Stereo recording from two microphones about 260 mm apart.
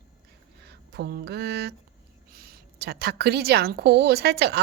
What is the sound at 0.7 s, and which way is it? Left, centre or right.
A woman's voice, right.